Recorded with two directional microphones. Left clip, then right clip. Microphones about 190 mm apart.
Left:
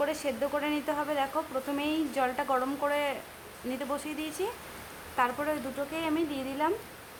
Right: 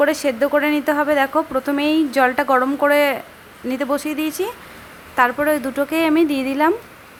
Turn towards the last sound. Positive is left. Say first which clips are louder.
# right 14 dB
turn(degrees=-30)  # may be behind; listen again after turning